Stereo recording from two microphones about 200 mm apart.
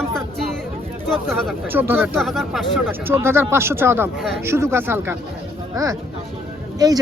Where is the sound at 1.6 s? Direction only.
10° right (ahead or behind).